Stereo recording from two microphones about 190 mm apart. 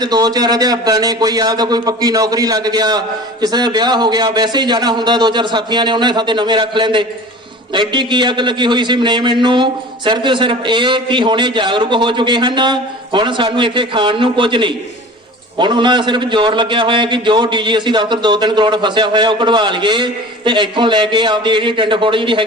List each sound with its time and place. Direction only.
0.0 s a man's voice: 20° right (ahead or behind)